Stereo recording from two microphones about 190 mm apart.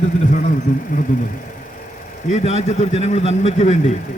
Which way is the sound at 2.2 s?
35° left (ahead or behind).